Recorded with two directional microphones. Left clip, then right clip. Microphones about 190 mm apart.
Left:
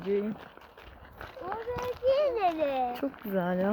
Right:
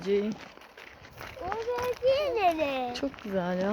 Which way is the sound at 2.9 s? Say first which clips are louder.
Even; 10° left (ahead or behind).